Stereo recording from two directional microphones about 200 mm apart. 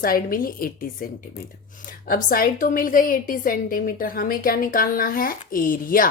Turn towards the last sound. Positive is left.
turn(degrees=45)  # may be behind; listen again after turning